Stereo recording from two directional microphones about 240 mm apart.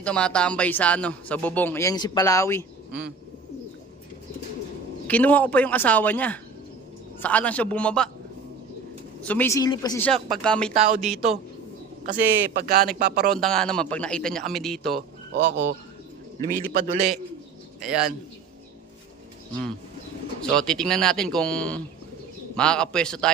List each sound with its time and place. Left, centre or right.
0.0 s speech: centre
5.0 s a man's voice: centre
9.2 s speech: centre
10.2 s a man's voice: centre
10.8 s speech: right
12.0 s speech: right
13.4 s a man's voice: centre
16.5 s speech: right
17.7 s a man's voice: centre
20.4 s a man's voice: centre